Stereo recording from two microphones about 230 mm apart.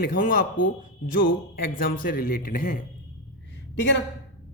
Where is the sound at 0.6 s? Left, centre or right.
Left.